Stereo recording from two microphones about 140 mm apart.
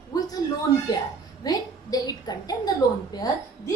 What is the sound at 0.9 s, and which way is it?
A woman's voice, 30° left (ahead or behind).